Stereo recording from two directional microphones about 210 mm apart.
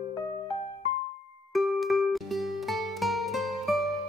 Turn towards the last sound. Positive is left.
turn(degrees=0)  # may be behind; listen again after turning